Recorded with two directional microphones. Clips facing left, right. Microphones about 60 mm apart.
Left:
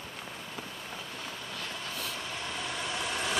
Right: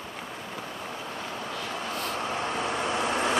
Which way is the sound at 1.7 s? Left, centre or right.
Right.